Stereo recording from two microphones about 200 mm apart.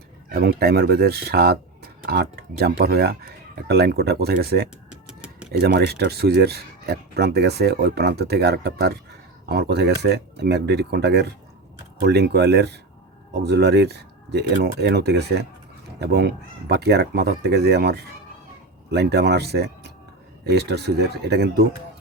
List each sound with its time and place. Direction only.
0.3 s speech: 50° right (ahead or behind)
4.9 s a sound: 5° right (ahead or behind)
5.5 s speech: 55° right (ahead or behind)